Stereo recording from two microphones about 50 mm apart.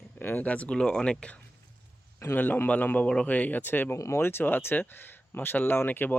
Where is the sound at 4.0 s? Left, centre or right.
Left.